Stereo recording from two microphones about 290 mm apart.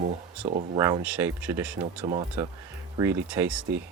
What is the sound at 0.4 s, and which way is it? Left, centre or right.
Speech, centre.